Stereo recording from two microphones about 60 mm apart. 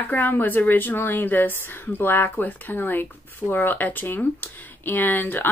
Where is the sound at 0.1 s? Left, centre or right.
Left.